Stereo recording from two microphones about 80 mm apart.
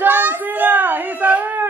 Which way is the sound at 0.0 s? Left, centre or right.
Right.